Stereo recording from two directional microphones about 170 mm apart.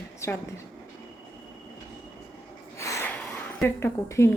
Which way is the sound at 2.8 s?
15° left (ahead or behind).